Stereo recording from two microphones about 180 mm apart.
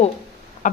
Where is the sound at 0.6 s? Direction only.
45° left (ahead or behind).